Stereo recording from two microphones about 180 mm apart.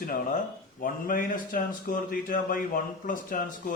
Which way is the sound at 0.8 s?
50° left (ahead or behind).